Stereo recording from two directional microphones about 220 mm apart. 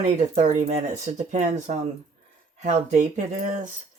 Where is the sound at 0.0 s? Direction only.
30° right (ahead or behind).